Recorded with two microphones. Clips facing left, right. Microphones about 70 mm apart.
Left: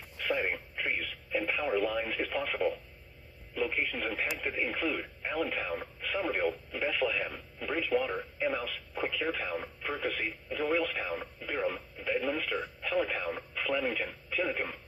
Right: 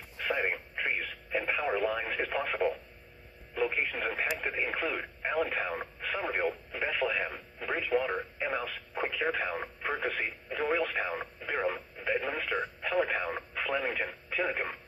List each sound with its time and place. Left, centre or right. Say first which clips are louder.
0.2 s radio: even; right
3.8 s speech: right 1 dB; right
4.6 s speech: even; right
7.9 s speech: right 1 dB; right
8.4 s speech: left 1 dB; right
11.3 s radio: right 1 dB; right
12.4 s speech: right 2 dB; right